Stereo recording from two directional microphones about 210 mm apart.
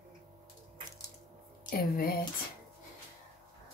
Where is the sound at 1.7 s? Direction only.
45° left (ahead or behind).